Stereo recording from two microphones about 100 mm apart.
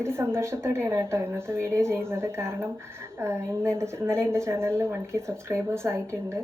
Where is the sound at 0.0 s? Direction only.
25° right (ahead or behind).